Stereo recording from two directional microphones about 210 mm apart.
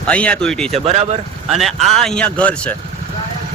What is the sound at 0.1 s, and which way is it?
A man's voice, 5° left (ahead or behind).